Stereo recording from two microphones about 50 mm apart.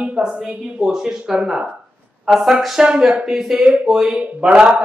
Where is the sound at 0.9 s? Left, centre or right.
Centre.